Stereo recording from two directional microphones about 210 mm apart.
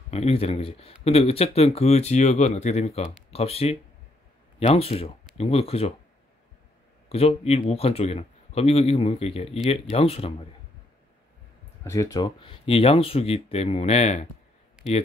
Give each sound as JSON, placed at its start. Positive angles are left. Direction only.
{"t": 0.1, "sound": "speech", "side_deg": 30}
{"t": 7.1, "sound": "speech", "side_deg": 30}
{"t": 11.8, "sound": "speech", "side_deg": 15}